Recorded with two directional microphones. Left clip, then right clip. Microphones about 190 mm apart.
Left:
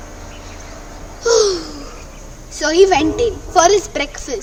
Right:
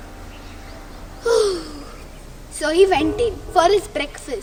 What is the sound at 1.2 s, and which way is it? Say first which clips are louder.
Babbling: left 4 dB; 15° left (ahead or behind).